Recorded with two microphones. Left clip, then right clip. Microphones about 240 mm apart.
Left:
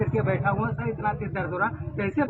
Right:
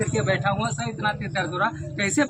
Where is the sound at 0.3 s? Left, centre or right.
Centre.